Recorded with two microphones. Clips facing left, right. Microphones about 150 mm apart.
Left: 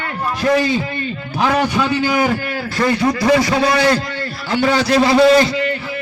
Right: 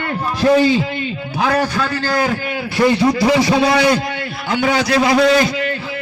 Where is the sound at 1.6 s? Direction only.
20° left (ahead or behind).